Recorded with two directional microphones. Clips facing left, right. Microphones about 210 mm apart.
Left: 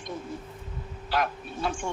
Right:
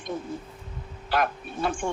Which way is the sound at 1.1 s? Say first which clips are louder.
Right 2 dB; 55° right (ahead or behind).